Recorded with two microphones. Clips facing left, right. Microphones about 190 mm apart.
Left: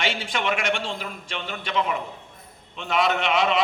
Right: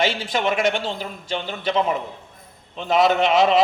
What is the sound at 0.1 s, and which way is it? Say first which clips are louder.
A man's voice: right 4 dB; 35° right (ahead or behind).